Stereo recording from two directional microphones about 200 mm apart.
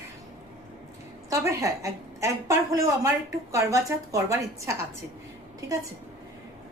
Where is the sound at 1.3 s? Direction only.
15° right (ahead or behind).